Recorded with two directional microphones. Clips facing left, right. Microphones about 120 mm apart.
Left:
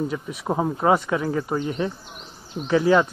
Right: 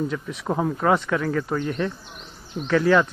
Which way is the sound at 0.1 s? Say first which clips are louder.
Even; 10° left (ahead or behind).